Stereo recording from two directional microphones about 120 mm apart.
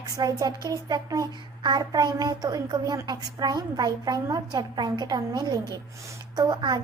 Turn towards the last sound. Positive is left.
turn(degrees=-35)  # may be behind; listen again after turning